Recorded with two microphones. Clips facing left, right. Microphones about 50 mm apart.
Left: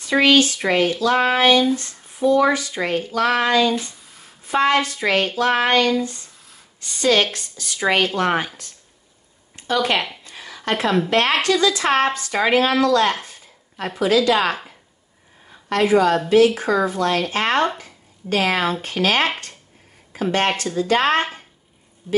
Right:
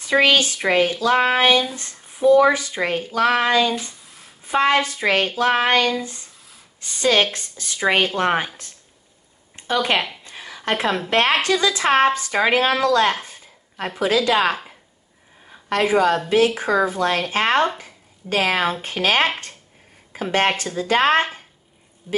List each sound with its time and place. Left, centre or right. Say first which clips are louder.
0.0 s speech: left 1 dB; centre
1.0 s a sound: left 1 dB; centre
1.8 s speech: even; right
5.4 s a sound: even; centre
6.8 s speech: even; right
9.6 s speech: even; right
10.2 s a sound: even; right
11.1 s speech: right 3 dB; right
13.1 s a sound: even; right
14.0 s speech: left 1 dB; right
15.7 s speech: left 1 dB; right
22.0 s speech: left 4 dB; centre